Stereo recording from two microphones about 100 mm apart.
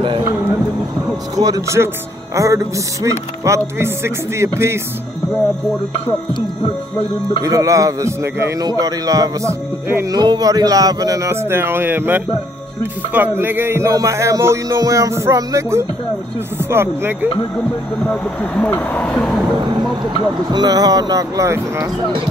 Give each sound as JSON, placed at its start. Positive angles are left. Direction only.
{"t": 1.3, "sound": "speech", "side_deg": -35}
{"t": 7.4, "sound": "speech", "side_deg": -35}
{"t": 10.1, "sound": "speech", "side_deg": -40}
{"t": 13.1, "sound": "music", "side_deg": -20}
{"t": 18.0, "sound": "speech", "side_deg": 15}
{"t": 19.1, "sound": "a sound", "side_deg": 0}
{"t": 20.4, "sound": "speech", "side_deg": -45}